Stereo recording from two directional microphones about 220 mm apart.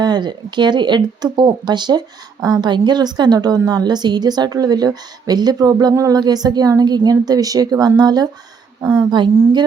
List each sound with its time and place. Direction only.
0.0 s a woman's voice: 20° right (ahead or behind)